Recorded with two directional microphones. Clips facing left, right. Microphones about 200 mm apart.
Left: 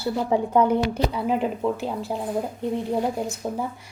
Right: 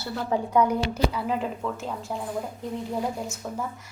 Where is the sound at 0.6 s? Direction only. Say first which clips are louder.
Left 1 dB; 30° left (ahead or behind).